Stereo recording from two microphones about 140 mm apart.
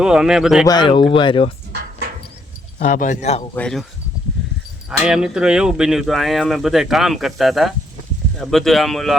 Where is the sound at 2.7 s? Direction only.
65° left (ahead or behind).